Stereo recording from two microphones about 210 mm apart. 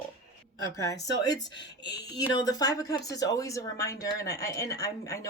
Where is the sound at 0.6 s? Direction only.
15° left (ahead or behind).